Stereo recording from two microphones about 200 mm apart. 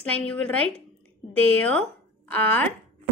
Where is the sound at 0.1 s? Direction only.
5° left (ahead or behind).